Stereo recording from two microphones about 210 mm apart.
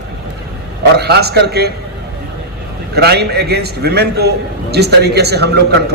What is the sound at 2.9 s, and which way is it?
A man's voice, 50° right (ahead or behind).